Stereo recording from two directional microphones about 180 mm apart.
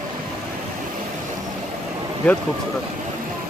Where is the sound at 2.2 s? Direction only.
10° left (ahead or behind).